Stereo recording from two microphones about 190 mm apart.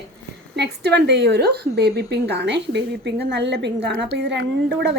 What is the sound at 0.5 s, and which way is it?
Speech, 60° right (ahead or behind).